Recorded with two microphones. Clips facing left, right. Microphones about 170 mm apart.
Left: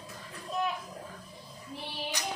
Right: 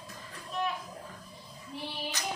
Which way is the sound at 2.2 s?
15° left (ahead or behind).